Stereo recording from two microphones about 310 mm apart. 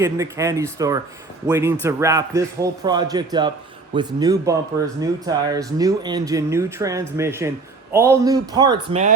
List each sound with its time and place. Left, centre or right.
0.0 s speech: centre